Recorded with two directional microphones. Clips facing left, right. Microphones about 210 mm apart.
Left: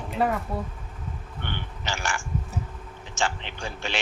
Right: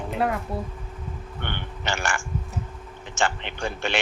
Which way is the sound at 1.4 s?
60° right (ahead or behind).